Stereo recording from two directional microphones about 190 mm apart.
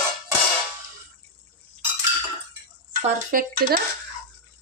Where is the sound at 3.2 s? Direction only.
50° right (ahead or behind).